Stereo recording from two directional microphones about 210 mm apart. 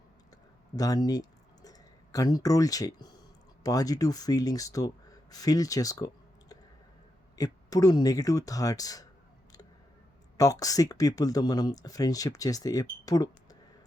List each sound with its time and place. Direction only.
0.8 s a sound: 20° left (ahead or behind)
2.1 s speech: 15° left (ahead or behind)
7.3 s speech: 15° left (ahead or behind)
10.3 s speech: 15° left (ahead or behind)